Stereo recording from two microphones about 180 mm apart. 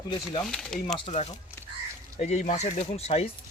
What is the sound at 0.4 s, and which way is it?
Speech, centre (ahead or behind).